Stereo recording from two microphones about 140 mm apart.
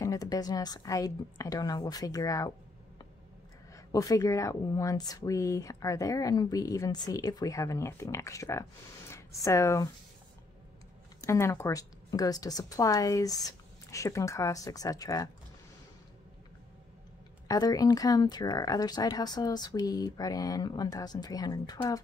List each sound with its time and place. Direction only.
0.0 s speech: 25° left (ahead or behind)
3.7 s speech: 25° left (ahead or behind)
11.1 s speech: 20° left (ahead or behind)
17.5 s speech: 25° left (ahead or behind)